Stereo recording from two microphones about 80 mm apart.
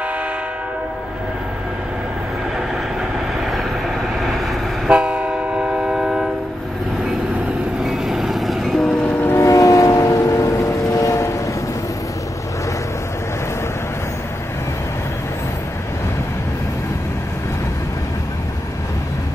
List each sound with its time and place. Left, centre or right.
4.8 s train: centre
7.8 s train: centre
9.2 s vehicle: left